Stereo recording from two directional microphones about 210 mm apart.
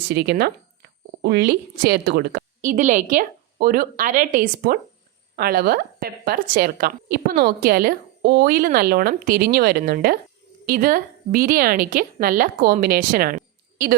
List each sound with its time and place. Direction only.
0.1 s a woman's voice: 50° right (ahead or behind)